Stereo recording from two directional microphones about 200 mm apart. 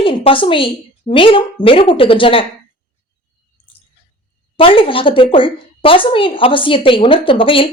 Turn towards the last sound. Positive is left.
turn(degrees=25)  # may be behind; listen again after turning